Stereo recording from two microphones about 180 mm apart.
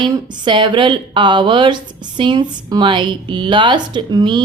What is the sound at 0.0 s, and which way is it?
Speech, 25° right (ahead or behind).